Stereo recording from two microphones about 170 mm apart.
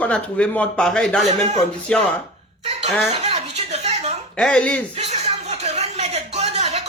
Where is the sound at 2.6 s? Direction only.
40° right (ahead or behind).